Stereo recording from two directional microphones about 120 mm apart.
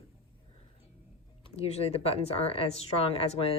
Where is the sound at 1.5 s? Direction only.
60° left (ahead or behind).